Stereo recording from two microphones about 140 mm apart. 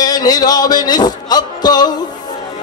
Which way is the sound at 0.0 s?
30° left (ahead or behind).